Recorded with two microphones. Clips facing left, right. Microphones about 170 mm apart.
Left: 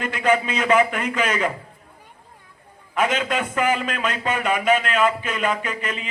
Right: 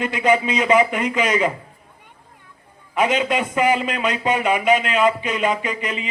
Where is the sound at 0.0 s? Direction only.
10° right (ahead or behind).